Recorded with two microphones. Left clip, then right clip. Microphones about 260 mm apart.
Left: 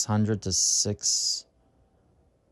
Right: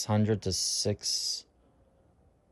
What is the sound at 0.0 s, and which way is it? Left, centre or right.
Speech, centre.